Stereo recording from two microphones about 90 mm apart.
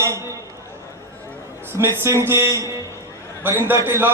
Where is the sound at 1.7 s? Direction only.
30° right (ahead or behind).